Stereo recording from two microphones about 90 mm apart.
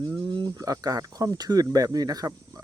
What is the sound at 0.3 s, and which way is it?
Cricket, 55° right (ahead or behind).